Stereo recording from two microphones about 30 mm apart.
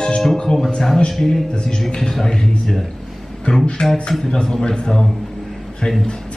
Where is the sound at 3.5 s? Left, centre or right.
Left.